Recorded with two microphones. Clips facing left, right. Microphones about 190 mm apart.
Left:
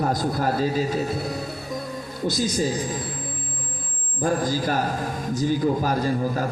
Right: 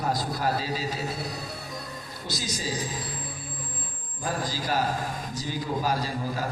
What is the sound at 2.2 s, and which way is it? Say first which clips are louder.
Speech: left 10 dB; 50° left (ahead or behind).